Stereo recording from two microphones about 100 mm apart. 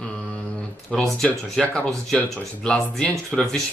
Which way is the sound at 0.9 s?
5° left (ahead or behind).